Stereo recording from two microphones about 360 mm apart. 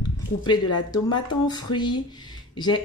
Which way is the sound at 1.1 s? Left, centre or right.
Centre.